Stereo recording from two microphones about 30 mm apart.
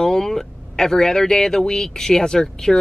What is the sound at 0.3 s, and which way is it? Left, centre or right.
Speech, centre.